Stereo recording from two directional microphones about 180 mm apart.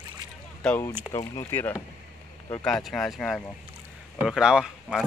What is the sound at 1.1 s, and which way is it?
Speech, 35° left (ahead or behind).